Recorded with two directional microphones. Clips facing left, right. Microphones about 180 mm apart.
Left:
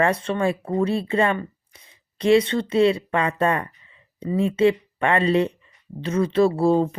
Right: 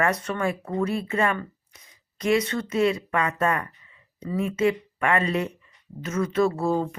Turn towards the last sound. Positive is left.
turn(degrees=30)  # may be behind; listen again after turning